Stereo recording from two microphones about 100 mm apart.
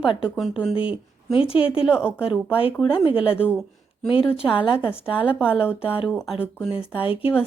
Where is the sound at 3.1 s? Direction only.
65° left (ahead or behind).